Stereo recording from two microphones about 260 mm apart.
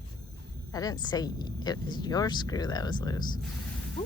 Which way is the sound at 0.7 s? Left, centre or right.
Centre.